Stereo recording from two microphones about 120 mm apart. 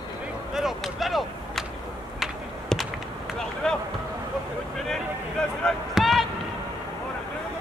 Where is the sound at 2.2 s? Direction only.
Centre (ahead or behind).